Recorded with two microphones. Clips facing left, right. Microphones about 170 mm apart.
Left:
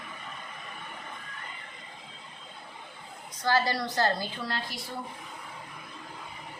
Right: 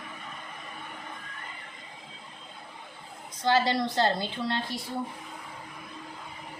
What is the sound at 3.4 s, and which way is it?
A woman's voice, 20° right (ahead or behind).